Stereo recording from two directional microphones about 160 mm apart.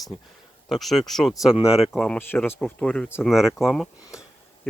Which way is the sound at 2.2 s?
15° left (ahead or behind).